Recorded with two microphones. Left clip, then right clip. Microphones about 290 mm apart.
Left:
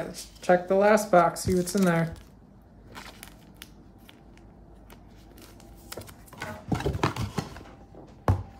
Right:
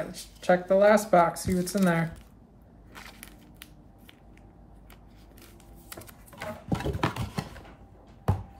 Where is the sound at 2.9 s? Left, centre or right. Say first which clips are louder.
Left 2 dB; centre.